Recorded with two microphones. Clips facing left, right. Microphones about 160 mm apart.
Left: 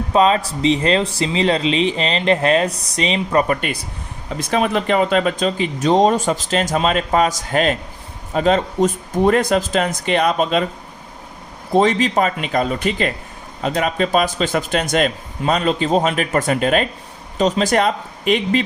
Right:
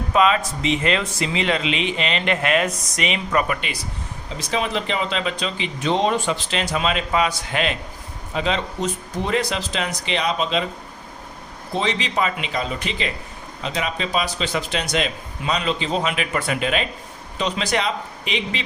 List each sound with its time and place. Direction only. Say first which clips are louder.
0.1 s speech: left 3 dB; 35° left (ahead or behind)
4.4 s speech: left 6 dB; 55° left (ahead or behind)
11.7 s speech: left 9 dB; 45° left (ahead or behind)